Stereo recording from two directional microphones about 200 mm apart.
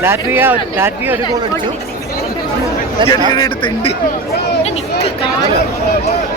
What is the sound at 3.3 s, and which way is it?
Speech, 20° left (ahead or behind).